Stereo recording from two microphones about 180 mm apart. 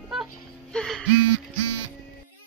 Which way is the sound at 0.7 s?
5° left (ahead or behind).